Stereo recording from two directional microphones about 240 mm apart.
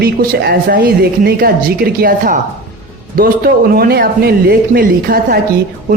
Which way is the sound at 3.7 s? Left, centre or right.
Right.